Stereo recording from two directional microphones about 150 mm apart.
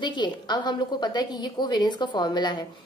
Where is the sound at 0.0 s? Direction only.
30° left (ahead or behind).